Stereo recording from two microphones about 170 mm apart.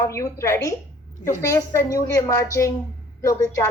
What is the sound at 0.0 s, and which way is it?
A woman's voice, 15° left (ahead or behind).